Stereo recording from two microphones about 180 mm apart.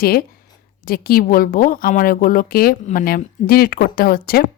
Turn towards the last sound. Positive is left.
turn(degrees=55)  # may be behind; listen again after turning